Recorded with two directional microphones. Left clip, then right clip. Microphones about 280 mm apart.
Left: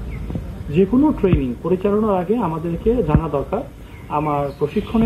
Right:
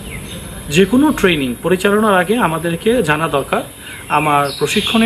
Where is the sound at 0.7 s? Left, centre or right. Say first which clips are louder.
Right 4 dB; right.